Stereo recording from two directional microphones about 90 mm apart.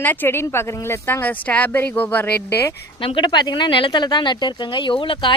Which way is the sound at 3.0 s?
55° left (ahead or behind).